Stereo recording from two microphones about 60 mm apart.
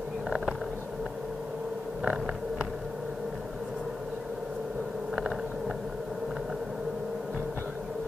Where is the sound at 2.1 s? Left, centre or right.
Centre.